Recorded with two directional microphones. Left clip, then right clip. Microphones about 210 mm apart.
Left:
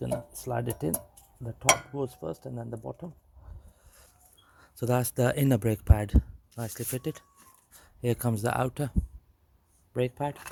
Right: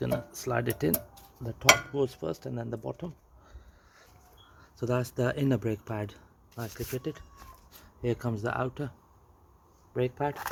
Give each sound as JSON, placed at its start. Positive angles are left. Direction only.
{"t": 0.0, "sound": "speech", "side_deg": 15}
{"t": 1.5, "sound": "speech", "side_deg": 0}
{"t": 4.5, "sound": "speech", "side_deg": 50}
{"t": 9.9, "sound": "speech", "side_deg": 40}